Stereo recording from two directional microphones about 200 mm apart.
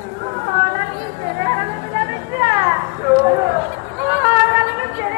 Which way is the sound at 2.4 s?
20° right (ahead or behind).